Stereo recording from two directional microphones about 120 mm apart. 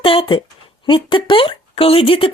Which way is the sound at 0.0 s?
50° left (ahead or behind).